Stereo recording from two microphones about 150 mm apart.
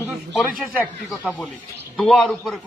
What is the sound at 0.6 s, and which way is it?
A man's voice, 5° right (ahead or behind).